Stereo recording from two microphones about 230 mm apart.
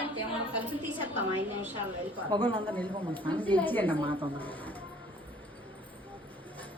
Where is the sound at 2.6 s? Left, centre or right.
Centre.